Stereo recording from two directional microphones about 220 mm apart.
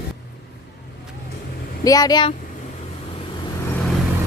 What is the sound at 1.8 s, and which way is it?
Speech, 15° left (ahead or behind).